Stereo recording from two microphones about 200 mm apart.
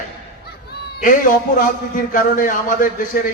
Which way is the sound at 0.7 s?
45° left (ahead or behind).